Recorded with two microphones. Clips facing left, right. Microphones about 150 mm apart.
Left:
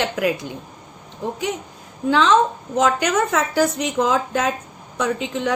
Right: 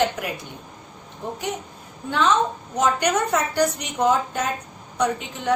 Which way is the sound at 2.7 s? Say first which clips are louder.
Left 2 dB; 90° left.